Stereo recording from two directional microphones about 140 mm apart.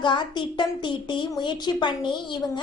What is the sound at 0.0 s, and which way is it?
A woman's voice, 35° left (ahead or behind).